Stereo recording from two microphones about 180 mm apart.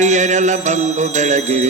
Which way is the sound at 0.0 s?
40° right (ahead or behind).